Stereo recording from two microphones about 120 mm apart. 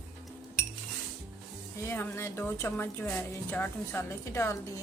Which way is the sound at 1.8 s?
20° left (ahead or behind).